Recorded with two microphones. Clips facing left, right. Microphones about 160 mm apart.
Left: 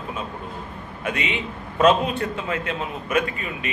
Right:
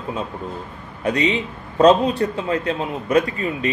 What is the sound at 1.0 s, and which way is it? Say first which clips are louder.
A man's voice: right 7 dB; 35° right (ahead or behind).